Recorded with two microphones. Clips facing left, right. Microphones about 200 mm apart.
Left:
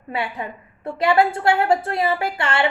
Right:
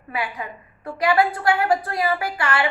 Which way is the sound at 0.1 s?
25° left (ahead or behind).